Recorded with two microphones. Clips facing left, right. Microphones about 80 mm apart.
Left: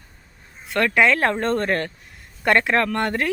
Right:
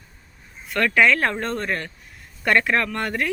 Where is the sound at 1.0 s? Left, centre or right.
Left.